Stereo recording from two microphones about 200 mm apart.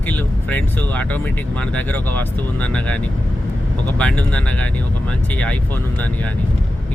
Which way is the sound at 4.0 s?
5° left (ahead or behind).